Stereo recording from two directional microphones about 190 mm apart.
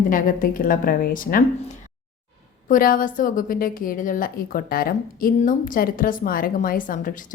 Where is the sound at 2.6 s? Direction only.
45° left (ahead or behind).